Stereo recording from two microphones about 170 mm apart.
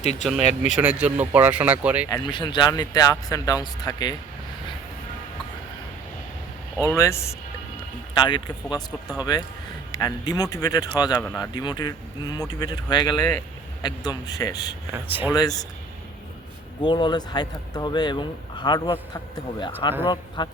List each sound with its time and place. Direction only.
0.0 s speech: 40° left (ahead or behind)
0.8 s speech: 10° right (ahead or behind)
2.0 s speech: 25° left (ahead or behind)
6.8 s a man's voice: 15° left (ahead or behind)
8.1 s speech: 25° left (ahead or behind)
14.9 s speech: 10° right (ahead or behind)
15.3 s speech: 20° left (ahead or behind)
16.8 s speech: 25° left (ahead or behind)